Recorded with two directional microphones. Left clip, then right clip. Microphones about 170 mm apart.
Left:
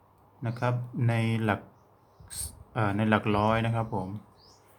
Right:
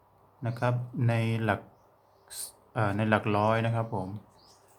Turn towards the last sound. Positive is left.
turn(degrees=5)  # may be behind; listen again after turning